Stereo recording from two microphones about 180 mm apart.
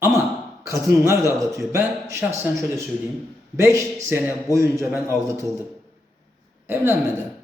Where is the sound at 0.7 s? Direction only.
15° right (ahead or behind).